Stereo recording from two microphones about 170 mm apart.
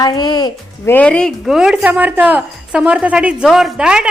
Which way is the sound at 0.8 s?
10° left (ahead or behind).